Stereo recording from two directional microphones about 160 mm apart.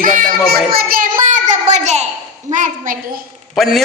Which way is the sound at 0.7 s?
65° right (ahead or behind).